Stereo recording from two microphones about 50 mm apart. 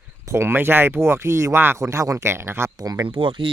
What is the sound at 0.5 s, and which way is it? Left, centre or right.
Speech, right.